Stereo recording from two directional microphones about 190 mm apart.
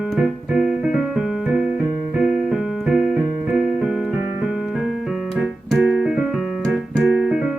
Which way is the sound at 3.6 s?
5° right (ahead or behind).